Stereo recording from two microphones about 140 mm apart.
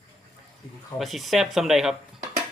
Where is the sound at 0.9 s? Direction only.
Centre (ahead or behind).